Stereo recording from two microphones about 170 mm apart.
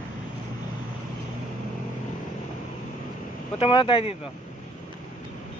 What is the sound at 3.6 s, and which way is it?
Speech, 30° left (ahead or behind).